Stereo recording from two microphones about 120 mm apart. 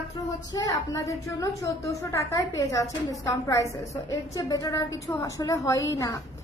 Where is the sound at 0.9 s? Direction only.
30° left (ahead or behind).